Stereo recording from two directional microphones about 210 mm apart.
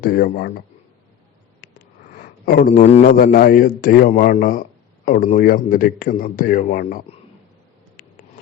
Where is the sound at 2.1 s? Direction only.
40° left (ahead or behind).